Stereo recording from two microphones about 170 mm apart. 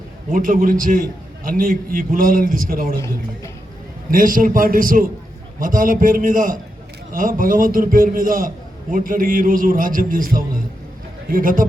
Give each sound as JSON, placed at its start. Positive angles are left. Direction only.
{"t": 0.3, "sound": "a man's voice", "side_deg": -55}
{"t": 4.1, "sound": "a man's voice", "side_deg": -55}